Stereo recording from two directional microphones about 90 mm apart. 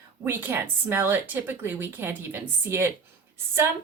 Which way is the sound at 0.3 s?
25° right (ahead or behind).